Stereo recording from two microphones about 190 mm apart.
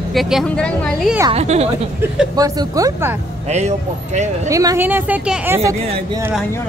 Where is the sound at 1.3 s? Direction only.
35° right (ahead or behind).